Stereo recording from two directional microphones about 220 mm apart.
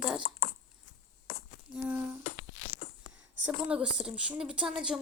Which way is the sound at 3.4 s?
5° right (ahead or behind).